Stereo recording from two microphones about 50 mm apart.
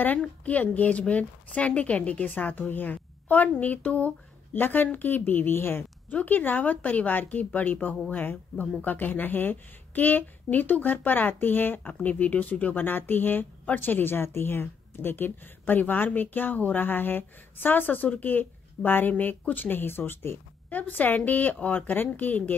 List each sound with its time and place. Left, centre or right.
0.5 s speech: left
4.6 s speech: left
6.1 s speech: left
12.0 s speech: left
20.7 s speech: left